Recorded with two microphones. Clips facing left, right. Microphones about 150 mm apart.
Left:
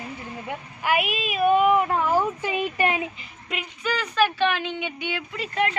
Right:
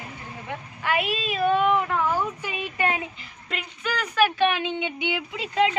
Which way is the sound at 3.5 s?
Centre (ahead or behind).